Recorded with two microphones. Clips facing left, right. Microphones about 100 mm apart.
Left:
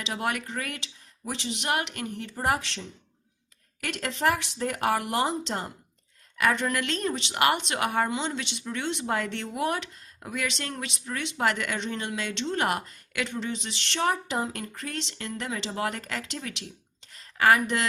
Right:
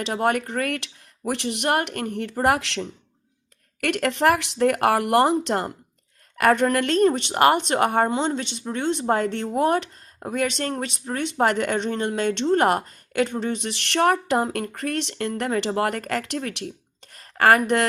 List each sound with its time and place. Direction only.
0.0 s speech: 45° right (ahead or behind); by 2.8 s 80° right
3.8 s speech: 65° right (ahead or behind)
6.3 s a woman's voice: 50° right (ahead or behind)